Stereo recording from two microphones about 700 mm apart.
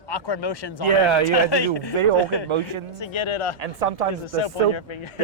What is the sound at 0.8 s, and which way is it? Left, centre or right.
Speech, right.